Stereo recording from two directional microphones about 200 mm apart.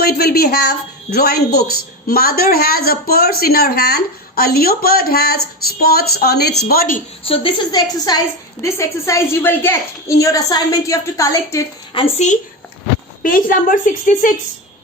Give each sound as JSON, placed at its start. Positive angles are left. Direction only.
{"t": 0.0, "sound": "a woman's voice", "side_deg": 50}
{"t": 7.3, "sound": "a woman's voice", "side_deg": 25}
{"t": 12.1, "sound": "a woman's voice", "side_deg": 35}